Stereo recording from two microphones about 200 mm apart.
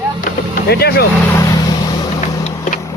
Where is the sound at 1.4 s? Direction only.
15° left (ahead or behind).